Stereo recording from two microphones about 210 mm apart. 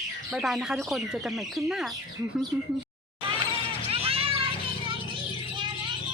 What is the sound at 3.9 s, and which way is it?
Music, 25° right (ahead or behind).